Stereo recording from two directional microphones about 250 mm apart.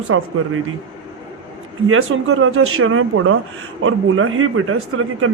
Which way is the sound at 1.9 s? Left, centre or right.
Right.